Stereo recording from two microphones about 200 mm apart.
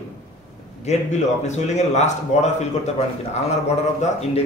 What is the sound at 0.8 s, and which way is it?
Speech, 35° left (ahead or behind).